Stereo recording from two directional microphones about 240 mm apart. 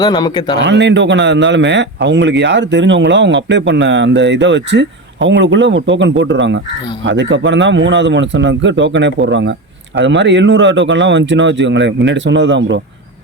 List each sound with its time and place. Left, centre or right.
0.0 s speech: centre
0.6 s a man's voice: right